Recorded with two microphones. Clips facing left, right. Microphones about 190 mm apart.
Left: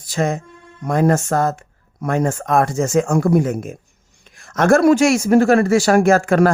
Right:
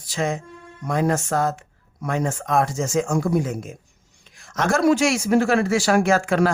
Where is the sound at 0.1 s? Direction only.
50° left (ahead or behind).